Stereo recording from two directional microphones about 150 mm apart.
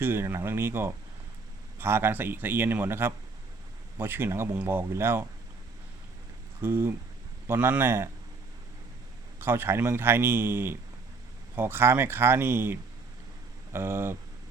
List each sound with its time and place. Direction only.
0.0 s a man's voice: 15° right (ahead or behind)
6.6 s a man's voice: 15° right (ahead or behind)
9.4 s a man's voice: 15° right (ahead or behind)